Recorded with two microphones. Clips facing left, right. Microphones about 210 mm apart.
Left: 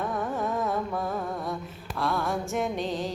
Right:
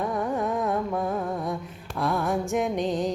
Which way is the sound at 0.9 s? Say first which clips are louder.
Right 3 dB; centre (ahead or behind).